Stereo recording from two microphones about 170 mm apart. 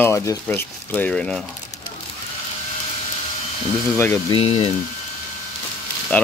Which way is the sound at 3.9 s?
15° left (ahead or behind).